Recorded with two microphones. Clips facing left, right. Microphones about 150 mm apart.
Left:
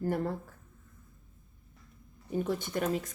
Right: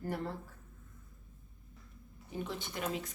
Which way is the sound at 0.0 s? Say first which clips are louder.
Left 7 dB; 45° left (ahead or behind).